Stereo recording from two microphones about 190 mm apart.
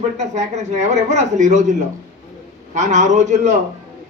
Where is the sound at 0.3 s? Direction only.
35° right (ahead or behind).